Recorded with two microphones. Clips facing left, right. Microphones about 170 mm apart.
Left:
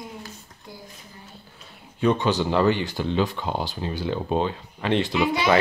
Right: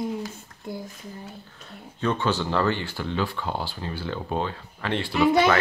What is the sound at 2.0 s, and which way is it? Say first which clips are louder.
Speech: left 4 dB; 15° left (ahead or behind).